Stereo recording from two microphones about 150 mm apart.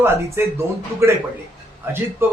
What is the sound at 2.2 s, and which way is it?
Speech, 15° right (ahead or behind).